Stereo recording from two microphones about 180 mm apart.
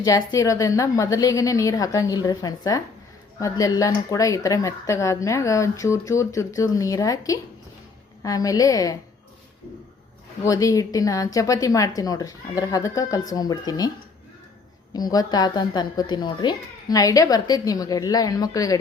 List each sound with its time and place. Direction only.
0.0 s a woman's voice: 20° left (ahead or behind)
10.4 s a woman's voice: 20° left (ahead or behind)
14.9 s a woman's voice: 20° left (ahead or behind)